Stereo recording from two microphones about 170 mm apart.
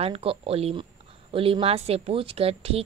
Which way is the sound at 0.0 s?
35° right (ahead or behind).